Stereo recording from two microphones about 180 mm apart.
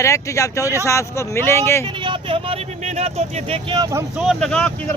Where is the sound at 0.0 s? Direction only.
15° left (ahead or behind).